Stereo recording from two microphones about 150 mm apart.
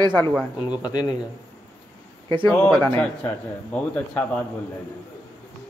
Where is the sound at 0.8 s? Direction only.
25° left (ahead or behind).